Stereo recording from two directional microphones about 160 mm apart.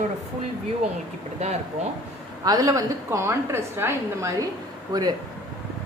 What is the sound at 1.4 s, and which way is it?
Speech, 40° right (ahead or behind).